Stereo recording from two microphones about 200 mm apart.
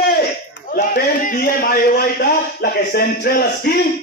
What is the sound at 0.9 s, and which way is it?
A man's voice, 40° left (ahead or behind).